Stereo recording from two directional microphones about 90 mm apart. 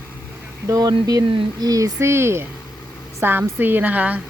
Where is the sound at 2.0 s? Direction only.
30° right (ahead or behind).